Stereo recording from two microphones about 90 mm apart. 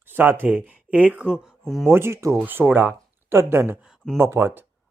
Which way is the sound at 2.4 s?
20° right (ahead or behind).